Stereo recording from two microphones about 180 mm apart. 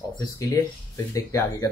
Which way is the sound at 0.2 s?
20° left (ahead or behind).